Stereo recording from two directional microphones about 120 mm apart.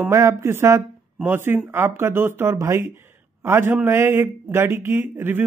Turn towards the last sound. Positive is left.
turn(degrees=-15)  # may be behind; listen again after turning